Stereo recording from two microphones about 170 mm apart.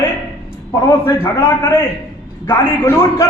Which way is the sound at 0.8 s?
15° left (ahead or behind).